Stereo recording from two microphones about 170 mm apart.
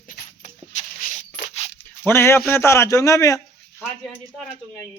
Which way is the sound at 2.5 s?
15° left (ahead or behind).